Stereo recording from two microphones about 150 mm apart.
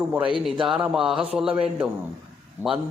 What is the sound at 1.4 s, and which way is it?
Speech, 10° right (ahead or behind).